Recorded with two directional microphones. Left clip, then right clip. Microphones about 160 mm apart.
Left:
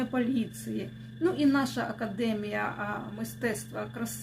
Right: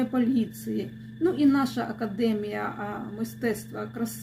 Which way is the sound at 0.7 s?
15° left (ahead or behind).